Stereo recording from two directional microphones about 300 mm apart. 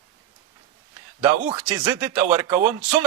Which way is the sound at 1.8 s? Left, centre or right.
Centre.